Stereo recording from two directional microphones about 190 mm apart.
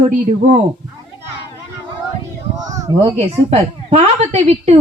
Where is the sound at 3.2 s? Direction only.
35° right (ahead or behind).